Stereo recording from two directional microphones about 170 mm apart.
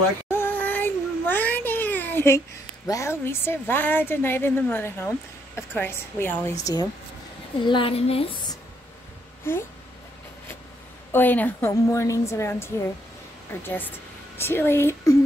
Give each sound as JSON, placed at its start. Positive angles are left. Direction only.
{"t": 0.3, "sound": "a sound", "side_deg": 10}
{"t": 2.9, "sound": "a woman's voice", "side_deg": 15}
{"t": 9.5, "sound": "a woman's voice", "side_deg": 15}
{"t": 11.1, "sound": "a woman's voice", "side_deg": 10}